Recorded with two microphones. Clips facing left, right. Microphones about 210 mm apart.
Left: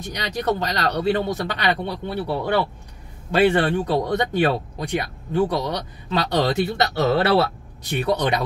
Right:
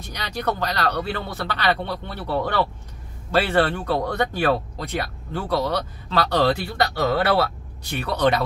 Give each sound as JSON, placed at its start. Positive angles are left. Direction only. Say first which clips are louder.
{"t": 0.1, "sound": "speech", "louder": "left 3 dB", "side_deg": 20}